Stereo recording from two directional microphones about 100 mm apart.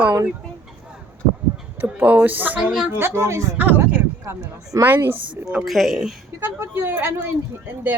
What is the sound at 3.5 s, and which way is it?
Speech, 15° right (ahead or behind).